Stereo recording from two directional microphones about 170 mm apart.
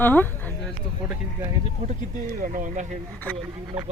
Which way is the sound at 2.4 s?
50° right (ahead or behind).